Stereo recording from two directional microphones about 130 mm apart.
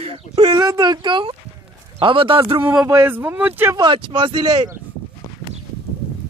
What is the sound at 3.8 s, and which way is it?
Speech, 40° right (ahead or behind).